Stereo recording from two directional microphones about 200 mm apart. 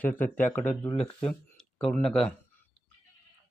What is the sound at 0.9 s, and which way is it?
Speech, 30° left (ahead or behind).